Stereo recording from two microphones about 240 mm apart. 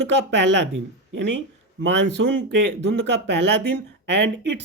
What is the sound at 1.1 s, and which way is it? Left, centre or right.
Speech, right.